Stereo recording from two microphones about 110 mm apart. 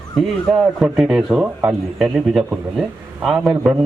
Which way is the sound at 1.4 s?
15° right (ahead or behind).